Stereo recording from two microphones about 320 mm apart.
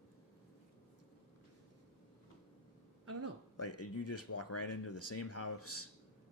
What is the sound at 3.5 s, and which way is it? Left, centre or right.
Speech, left.